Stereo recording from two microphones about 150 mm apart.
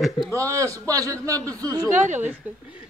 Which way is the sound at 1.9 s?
55° right (ahead or behind).